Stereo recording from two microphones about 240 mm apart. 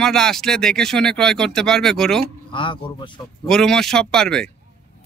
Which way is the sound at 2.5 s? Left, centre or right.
Left.